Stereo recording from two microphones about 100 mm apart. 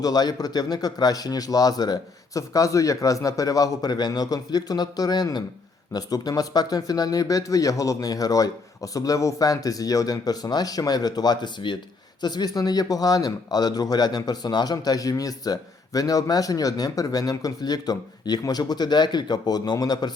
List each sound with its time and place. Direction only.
0.0 s speech: 40° left (ahead or behind)